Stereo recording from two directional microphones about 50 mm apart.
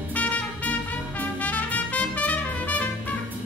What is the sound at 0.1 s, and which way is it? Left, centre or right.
Music, left.